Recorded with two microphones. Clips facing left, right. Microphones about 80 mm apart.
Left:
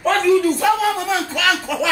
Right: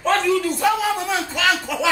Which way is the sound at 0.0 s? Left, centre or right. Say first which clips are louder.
Left 4 dB; centre.